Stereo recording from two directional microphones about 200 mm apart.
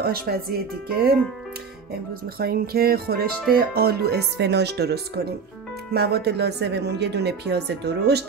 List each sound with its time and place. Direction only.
0.0 s speech: 50° right (ahead or behind)